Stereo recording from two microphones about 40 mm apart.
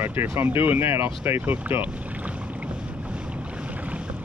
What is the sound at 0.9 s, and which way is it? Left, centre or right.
Speech, right.